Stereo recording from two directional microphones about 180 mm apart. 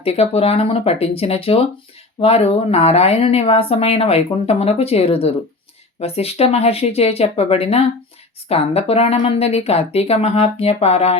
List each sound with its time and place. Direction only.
0.0 s speech: 35° left (ahead or behind)